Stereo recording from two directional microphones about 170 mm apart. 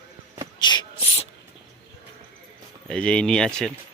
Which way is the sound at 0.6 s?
25° left (ahead or behind).